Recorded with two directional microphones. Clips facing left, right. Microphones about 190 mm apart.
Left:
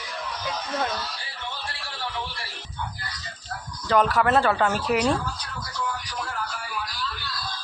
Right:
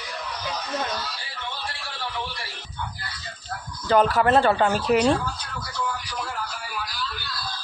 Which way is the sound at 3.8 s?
30° right (ahead or behind).